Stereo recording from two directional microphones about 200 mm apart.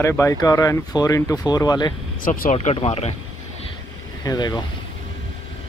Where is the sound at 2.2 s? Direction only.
45° left (ahead or behind).